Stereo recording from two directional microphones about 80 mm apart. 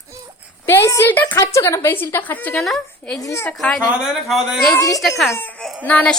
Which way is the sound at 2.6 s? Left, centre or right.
Centre.